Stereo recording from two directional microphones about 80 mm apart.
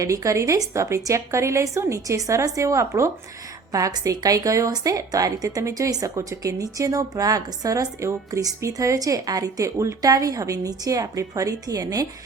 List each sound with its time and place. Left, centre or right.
0.0 s a woman's voice: right